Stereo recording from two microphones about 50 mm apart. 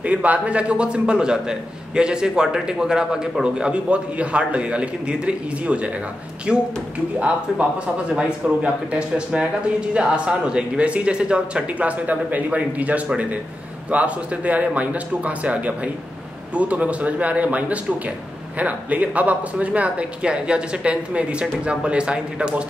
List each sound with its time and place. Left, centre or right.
0.0 s a man's voice: right